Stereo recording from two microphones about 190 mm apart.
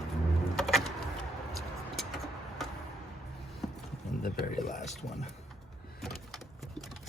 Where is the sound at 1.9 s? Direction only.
Centre (ahead or behind).